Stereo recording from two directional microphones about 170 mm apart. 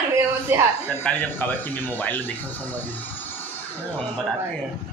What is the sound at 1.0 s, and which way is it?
A man's voice, 10° left (ahead or behind).